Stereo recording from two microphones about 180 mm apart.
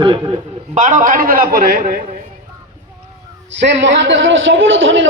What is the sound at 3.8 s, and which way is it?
A man's voice, 85° right.